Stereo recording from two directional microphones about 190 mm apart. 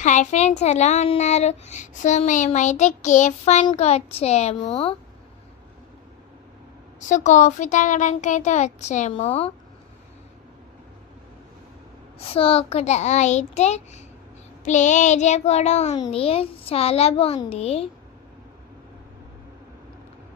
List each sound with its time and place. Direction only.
0.0 s a child's voice: 40° left (ahead or behind)
7.1 s a child's voice: 40° left (ahead or behind)
12.2 s a child's voice: 30° left (ahead or behind)